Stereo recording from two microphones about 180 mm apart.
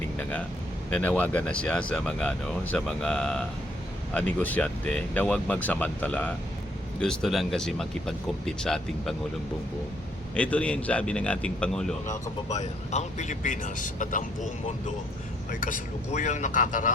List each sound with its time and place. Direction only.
0.2 s speech: 10° left (ahead or behind)
10.3 s speech: 5° left (ahead or behind)
12.0 s speech: 40° left (ahead or behind)